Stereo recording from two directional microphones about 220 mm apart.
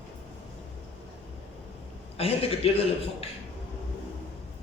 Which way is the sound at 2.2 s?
25° left (ahead or behind).